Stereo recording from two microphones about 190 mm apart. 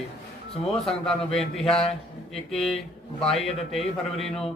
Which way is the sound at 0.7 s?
Centre (ahead or behind).